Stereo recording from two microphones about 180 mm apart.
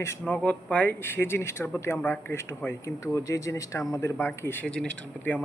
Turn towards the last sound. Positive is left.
turn(degrees=5)  # may be behind; listen again after turning